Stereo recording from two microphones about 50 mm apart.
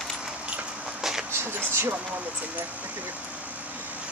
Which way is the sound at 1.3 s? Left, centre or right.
Right.